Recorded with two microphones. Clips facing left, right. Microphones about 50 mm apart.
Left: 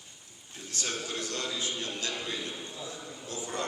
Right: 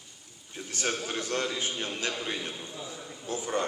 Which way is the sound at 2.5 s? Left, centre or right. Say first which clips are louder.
Even; centre.